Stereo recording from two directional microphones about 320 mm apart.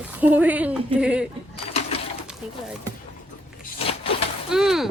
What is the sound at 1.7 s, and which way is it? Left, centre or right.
Bird, centre.